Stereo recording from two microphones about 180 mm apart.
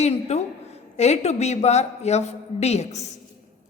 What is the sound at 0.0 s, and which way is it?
A woman's voice, 35° left (ahead or behind).